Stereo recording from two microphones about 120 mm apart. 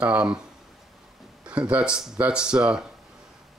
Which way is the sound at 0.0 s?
10° right (ahead or behind).